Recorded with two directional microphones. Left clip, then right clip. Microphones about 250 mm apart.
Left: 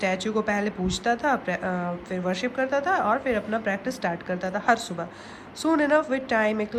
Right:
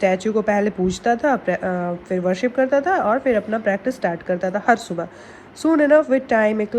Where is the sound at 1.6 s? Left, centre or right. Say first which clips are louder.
Right 5 dB; centre.